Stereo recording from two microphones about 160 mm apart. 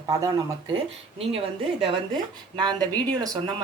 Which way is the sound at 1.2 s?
35° right (ahead or behind).